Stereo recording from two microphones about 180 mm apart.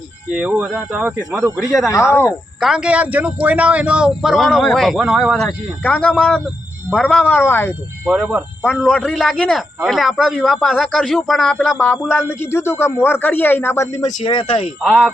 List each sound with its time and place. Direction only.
0.3 s speech: 5° right (ahead or behind)
1.9 s speech: 15° left (ahead or behind)
2.6 s speech: 5° right (ahead or behind)
7.3 s speech: 10° left (ahead or behind)
8.0 s speech: 5° right (ahead or behind); by 14.1 s 15° left (ahead or behind)
14.2 s speech: 30° left (ahead or behind)
14.8 s speech: centre (ahead or behind)